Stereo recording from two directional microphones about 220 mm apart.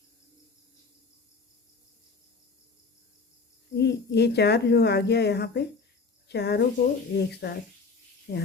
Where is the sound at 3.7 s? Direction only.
50° left (ahead or behind).